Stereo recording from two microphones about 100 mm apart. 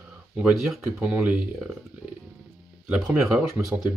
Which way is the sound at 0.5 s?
Centre (ahead or behind).